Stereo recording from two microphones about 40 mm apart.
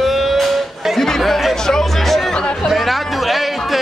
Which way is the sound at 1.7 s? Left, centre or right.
Centre.